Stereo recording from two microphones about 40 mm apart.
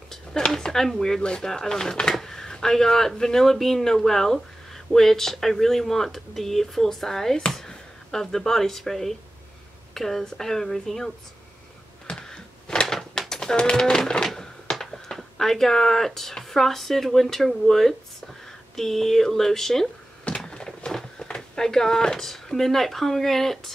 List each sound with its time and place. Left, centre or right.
0.6 s speech: centre
1.2 s speech: left
1.5 s speech: centre
12.1 s a sound: left
13.2 s bird: centre
13.6 s speech: left
20.2 s a sound: left; by 23.7 s centre